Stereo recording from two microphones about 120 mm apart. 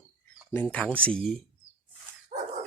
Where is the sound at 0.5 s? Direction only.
10° left (ahead or behind).